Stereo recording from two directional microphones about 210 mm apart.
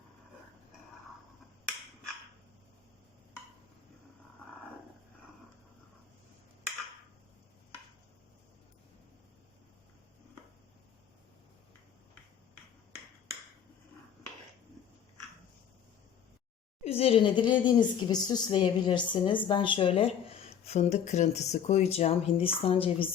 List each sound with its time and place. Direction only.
16.8 s speech: 30° left (ahead or behind)